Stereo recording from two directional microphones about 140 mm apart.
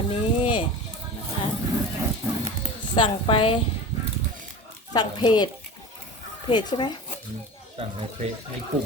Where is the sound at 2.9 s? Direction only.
40° left (ahead or behind).